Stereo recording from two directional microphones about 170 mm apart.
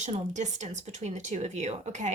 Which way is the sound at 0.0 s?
45° right (ahead or behind).